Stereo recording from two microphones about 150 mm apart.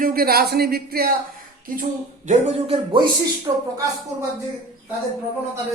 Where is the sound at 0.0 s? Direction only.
80° right.